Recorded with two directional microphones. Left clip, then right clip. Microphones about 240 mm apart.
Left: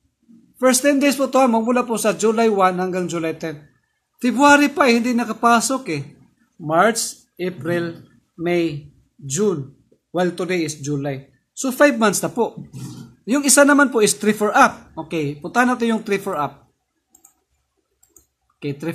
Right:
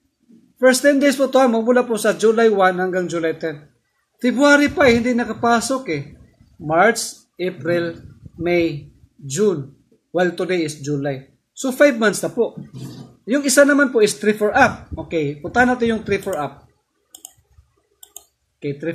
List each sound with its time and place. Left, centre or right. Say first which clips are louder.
0.6 s a man's voice: right 2 dB; centre
18.6 s speech: right 2 dB; left